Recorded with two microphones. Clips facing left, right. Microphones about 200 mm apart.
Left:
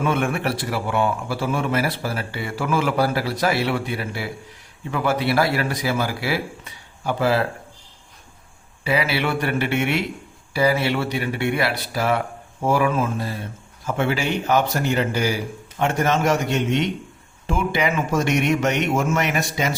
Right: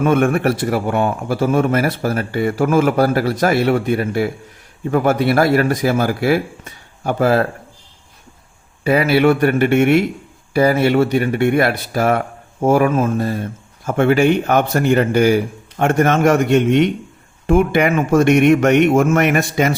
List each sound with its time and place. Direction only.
0.0 s a man's voice: 45° right (ahead or behind)
8.8 s a man's voice: 50° right (ahead or behind)